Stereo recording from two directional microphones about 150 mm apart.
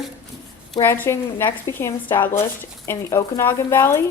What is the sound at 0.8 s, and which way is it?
Speech, 15° left (ahead or behind).